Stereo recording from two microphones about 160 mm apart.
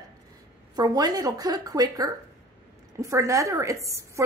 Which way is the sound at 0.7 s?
25° right (ahead or behind).